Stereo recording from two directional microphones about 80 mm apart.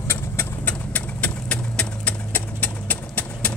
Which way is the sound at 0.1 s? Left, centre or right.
Left.